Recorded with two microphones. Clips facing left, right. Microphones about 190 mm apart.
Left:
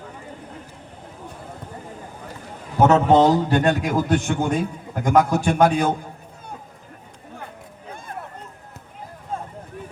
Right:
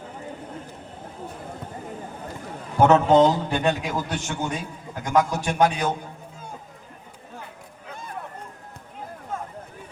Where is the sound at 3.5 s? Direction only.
55° left (ahead or behind).